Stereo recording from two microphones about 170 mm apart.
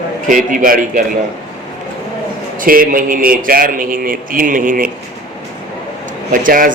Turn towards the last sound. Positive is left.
turn(degrees=-50)  # may be behind; listen again after turning